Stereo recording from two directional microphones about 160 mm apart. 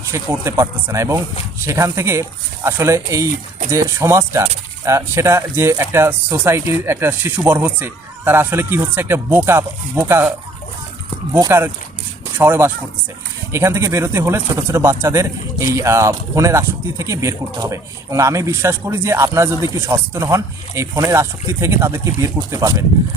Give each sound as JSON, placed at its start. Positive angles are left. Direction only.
{"t": 0.1, "sound": "speech", "side_deg": -15}